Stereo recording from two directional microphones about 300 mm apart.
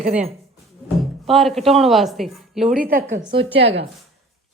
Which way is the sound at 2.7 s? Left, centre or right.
Right.